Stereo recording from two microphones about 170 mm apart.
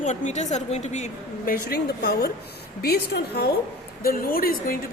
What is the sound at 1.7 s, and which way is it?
A woman's voice, 70° left (ahead or behind).